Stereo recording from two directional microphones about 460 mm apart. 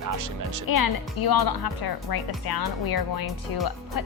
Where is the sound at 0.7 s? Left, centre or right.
Left.